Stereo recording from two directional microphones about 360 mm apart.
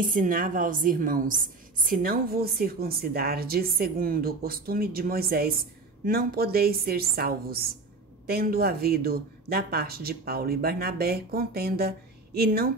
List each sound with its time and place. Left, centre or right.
0.0 s a woman's voice: right